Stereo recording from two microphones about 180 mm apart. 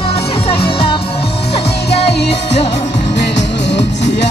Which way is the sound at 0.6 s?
30° left (ahead or behind).